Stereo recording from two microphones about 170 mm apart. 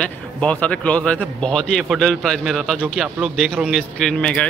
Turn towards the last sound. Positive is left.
turn(degrees=5)  # may be behind; listen again after turning